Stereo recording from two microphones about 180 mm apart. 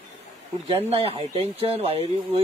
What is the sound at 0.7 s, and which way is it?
A man's voice, 35° right (ahead or behind).